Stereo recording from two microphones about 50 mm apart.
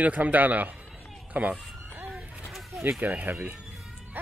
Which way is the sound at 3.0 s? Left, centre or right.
Right.